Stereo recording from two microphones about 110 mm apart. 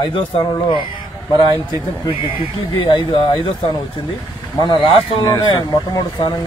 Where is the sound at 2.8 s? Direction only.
50° left (ahead or behind).